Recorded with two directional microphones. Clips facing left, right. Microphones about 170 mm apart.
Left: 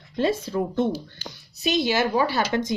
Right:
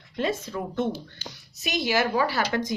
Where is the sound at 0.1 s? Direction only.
30° left (ahead or behind).